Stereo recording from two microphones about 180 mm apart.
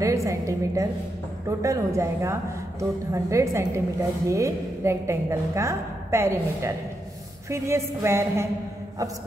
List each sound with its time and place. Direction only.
0.0 s a woman's voice: 15° right (ahead or behind)